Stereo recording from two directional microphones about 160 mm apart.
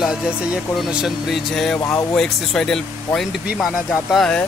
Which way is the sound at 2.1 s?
5° left (ahead or behind).